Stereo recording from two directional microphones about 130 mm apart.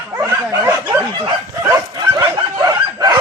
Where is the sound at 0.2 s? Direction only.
20° right (ahead or behind).